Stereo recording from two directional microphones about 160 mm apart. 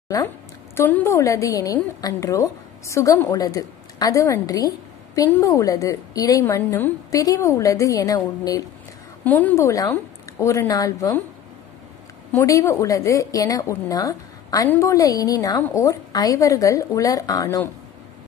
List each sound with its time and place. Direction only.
0.7 s a woman's voice: 15° left (ahead or behind)
9.2 s a woman's voice: 10° left (ahead or behind)
12.4 s a woman's voice: 20° left (ahead or behind)